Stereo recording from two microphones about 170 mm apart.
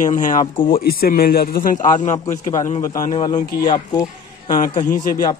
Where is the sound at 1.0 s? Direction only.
60° left (ahead or behind).